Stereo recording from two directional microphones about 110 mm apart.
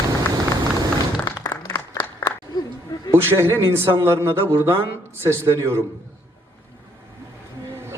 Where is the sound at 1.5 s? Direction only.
35° left (ahead or behind).